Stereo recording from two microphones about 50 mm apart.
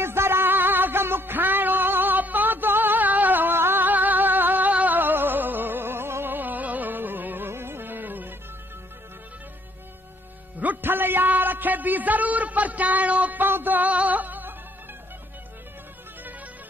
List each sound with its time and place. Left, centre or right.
0.0 s music: right
6.3 s music: right
10.8 s a sound: right